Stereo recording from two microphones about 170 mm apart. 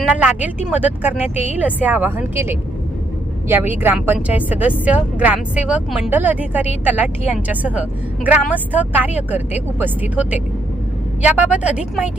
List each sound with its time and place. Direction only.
0.0 s a woman's voice: 10° right (ahead or behind)